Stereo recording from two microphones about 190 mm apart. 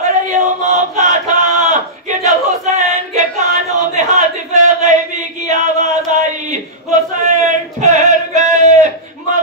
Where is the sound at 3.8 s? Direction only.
40° right (ahead or behind).